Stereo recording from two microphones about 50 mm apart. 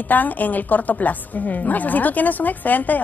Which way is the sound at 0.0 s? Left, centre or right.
Left.